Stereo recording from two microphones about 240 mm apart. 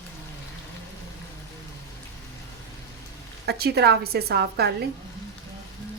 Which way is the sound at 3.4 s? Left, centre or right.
Right.